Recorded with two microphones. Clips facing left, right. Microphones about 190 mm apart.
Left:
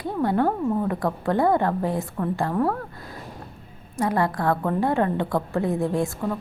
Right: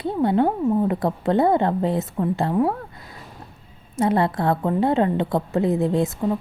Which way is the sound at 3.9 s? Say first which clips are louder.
Right 3 dB; 25° right (ahead or behind).